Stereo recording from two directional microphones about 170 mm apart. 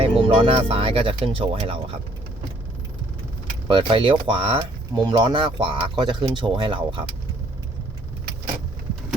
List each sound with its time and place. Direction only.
0.0 s speech: 35° right (ahead or behind)
3.7 s speech: 30° right (ahead or behind)